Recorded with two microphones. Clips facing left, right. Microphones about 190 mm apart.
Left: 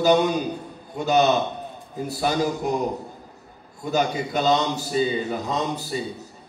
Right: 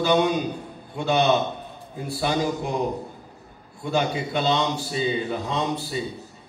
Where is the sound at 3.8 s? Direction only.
40° left (ahead or behind).